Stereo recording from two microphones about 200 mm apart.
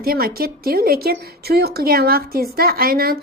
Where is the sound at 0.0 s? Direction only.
50° right (ahead or behind).